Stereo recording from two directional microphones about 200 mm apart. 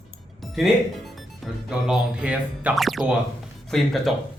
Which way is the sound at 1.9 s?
5° right (ahead or behind).